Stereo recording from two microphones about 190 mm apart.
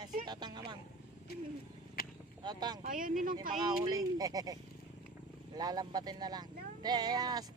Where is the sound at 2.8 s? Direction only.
45° right (ahead or behind).